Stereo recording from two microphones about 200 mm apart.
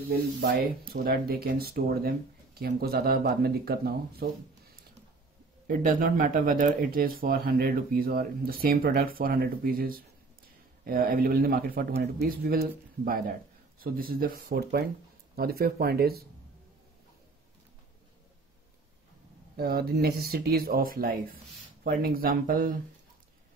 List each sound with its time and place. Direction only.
0.1 s speech: 50° right (ahead or behind)
5.7 s speech: 40° right (ahead or behind)
19.5 s speech: 50° right (ahead or behind)